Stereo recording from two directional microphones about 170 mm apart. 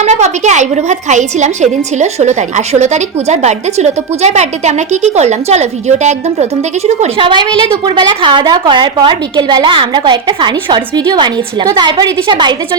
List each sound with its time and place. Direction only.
0.0 s a woman's voice: 40° right (ahead or behind); by 12.5 s 25° right (ahead or behind)